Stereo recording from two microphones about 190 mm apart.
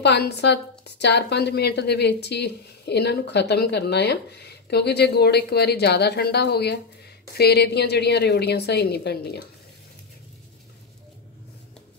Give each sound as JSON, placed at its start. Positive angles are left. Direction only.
{"t": 0.0, "sound": "a woman's voice", "side_deg": 60}